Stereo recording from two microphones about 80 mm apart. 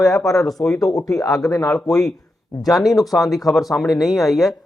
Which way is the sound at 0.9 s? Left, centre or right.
Left.